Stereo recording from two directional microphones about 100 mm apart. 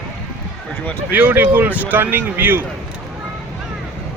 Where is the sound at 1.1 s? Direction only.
15° right (ahead or behind).